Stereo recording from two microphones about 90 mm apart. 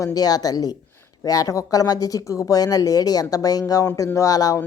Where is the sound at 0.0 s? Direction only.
45° left (ahead or behind).